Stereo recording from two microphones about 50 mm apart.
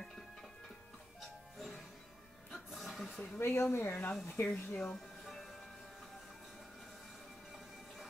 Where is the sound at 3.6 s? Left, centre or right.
Left.